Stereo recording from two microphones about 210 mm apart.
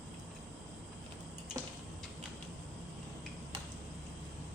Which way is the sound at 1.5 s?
15° right (ahead or behind).